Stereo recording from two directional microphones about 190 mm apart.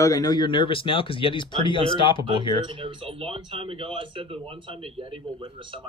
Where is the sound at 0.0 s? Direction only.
20° left (ahead or behind).